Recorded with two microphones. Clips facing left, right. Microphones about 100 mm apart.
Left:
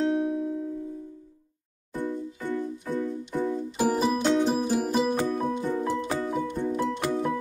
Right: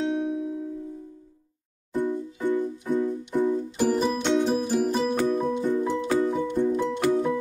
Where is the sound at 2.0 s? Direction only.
15° right (ahead or behind).